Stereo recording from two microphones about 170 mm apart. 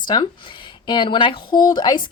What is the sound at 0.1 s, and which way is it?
A woman's voice, 25° left (ahead or behind).